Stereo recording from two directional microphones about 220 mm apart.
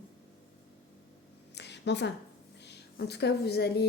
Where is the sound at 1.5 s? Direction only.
50° left (ahead or behind).